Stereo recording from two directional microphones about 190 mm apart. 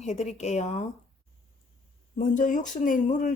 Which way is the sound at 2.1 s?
45° left (ahead or behind).